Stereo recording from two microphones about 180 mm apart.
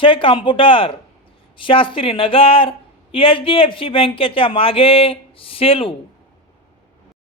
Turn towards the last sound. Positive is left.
turn(degrees=30)  # may be behind; listen again after turning